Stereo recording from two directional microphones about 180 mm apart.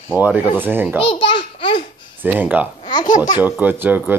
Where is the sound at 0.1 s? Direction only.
10° right (ahead or behind).